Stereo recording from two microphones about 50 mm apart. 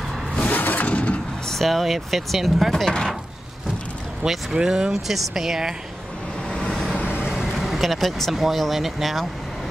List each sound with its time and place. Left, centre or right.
0.4 s vehicle: left
1.5 s speech: centre
4.2 s speech: centre
6.7 s vehicle: centre
7.0 s vehicle: left
7.5 s speech: centre